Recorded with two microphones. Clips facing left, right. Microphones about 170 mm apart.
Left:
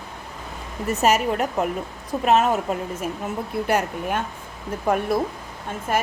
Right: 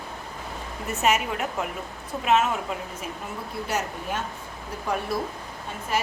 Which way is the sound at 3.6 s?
55° left (ahead or behind).